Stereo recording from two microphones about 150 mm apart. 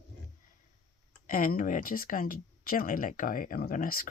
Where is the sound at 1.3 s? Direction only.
65° left (ahead or behind).